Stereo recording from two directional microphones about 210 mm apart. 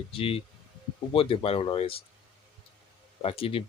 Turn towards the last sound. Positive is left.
turn(degrees=25)  # may be behind; listen again after turning